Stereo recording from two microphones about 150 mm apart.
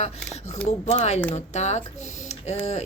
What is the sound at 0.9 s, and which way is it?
A woman's voice, 50° left (ahead or behind).